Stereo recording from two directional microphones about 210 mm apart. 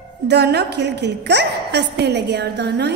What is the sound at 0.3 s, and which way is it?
A woman's voice, 50° right (ahead or behind).